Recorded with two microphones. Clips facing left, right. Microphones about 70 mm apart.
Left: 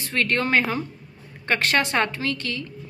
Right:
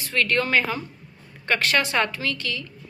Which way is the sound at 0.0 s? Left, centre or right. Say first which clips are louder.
Even; left.